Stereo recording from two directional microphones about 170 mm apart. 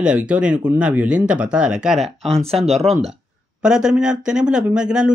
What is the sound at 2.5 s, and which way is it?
Speech, 35° right (ahead or behind).